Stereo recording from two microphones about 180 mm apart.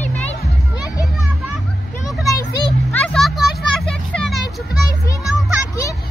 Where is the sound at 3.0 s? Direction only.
Centre (ahead or behind).